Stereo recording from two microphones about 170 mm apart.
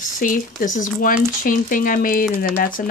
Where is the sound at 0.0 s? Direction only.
50° left (ahead or behind).